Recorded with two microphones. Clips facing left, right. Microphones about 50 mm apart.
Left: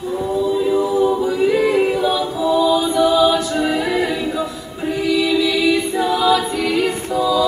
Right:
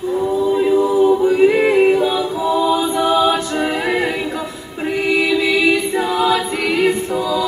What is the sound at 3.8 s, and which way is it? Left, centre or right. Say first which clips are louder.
Music: right 1 dB; right.